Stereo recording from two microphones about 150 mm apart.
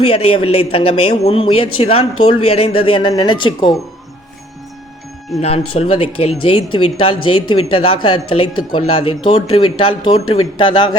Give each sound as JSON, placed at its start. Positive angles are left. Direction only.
{"t": 0.1, "sound": "speech", "side_deg": 40}
{"t": 5.4, "sound": "speech", "side_deg": 40}